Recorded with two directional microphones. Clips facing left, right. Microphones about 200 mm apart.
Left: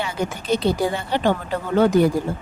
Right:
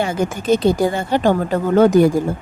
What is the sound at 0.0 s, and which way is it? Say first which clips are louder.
Speech: right 6 dB; 50° right (ahead or behind).